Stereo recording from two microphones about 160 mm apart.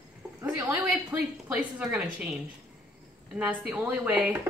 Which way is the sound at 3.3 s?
5° right (ahead or behind).